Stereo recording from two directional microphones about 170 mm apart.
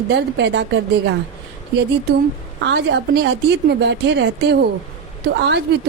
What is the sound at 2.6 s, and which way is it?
A woman's voice, 90° right.